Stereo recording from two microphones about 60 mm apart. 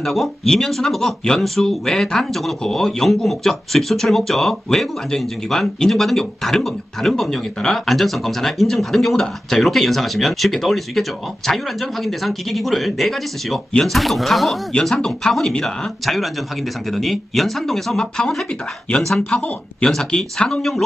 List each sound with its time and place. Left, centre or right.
0.0 s speech: centre
14.7 s speech: centre
19.8 s speech: centre